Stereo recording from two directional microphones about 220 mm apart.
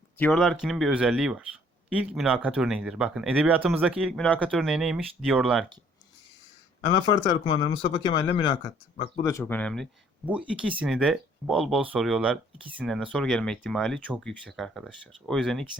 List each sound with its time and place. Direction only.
0.2 s speech: centre (ahead or behind)
6.9 s speech: 20° left (ahead or behind); by 15.8 s centre (ahead or behind)